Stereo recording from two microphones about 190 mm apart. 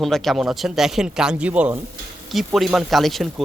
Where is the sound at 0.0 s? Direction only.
Centre (ahead or behind).